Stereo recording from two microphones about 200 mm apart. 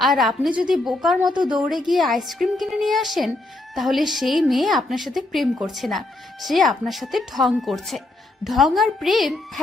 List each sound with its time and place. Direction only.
0.0 s speech: centre (ahead or behind)